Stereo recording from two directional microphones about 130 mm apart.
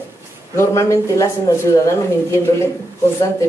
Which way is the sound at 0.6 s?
20° left (ahead or behind).